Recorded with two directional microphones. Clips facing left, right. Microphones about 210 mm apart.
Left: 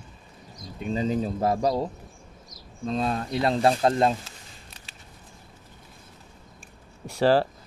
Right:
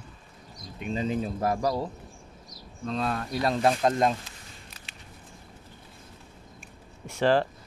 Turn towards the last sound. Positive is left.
turn(degrees=35)  # may be behind; listen again after turning